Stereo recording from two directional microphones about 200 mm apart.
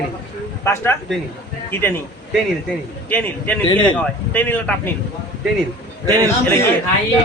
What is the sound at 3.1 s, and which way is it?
A man's voice, 10° left (ahead or behind).